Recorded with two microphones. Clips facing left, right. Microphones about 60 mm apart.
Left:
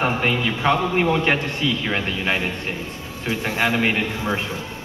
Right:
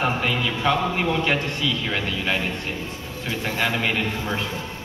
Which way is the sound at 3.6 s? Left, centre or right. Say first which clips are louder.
Left 3 dB; left.